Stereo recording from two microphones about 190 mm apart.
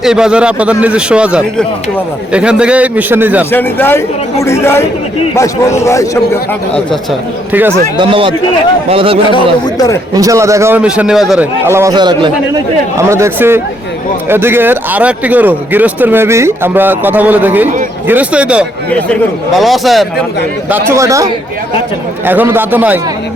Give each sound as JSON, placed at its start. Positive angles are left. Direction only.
{"t": 0.0, "sound": "a man's voice", "side_deg": -5}
{"t": 3.5, "sound": "speech", "side_deg": 10}
{"t": 7.5, "sound": "speech", "side_deg": -10}
{"t": 7.9, "sound": "a man's voice", "side_deg": -25}
{"t": 9.7, "sound": "speech", "side_deg": 20}
{"t": 10.2, "sound": "speech", "side_deg": -15}
{"t": 11.7, "sound": "a man's voice", "side_deg": -15}
{"t": 20.7, "sound": "speech", "side_deg": -10}
{"t": 22.3, "sound": "speech", "side_deg": -10}